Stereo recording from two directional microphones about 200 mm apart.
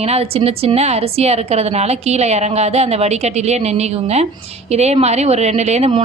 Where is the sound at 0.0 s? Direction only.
30° right (ahead or behind).